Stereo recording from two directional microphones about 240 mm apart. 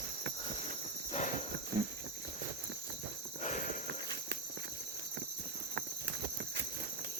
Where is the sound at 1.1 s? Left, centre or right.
Left.